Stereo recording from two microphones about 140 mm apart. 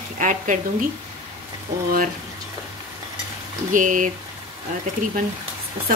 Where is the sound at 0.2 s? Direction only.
65° right (ahead or behind).